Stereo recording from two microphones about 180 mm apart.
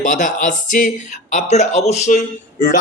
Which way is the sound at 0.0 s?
45° left (ahead or behind).